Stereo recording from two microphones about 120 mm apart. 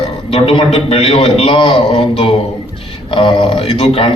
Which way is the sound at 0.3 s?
55° left (ahead or behind).